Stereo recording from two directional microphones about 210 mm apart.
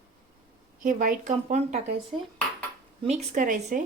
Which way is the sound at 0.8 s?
40° right (ahead or behind).